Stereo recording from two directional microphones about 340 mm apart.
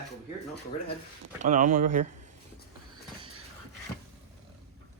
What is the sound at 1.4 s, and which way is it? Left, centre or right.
Speech, right.